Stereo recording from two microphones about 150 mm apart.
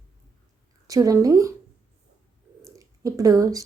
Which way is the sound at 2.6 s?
20° right (ahead or behind).